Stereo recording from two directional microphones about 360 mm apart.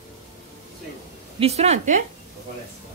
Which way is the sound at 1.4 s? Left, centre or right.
Centre.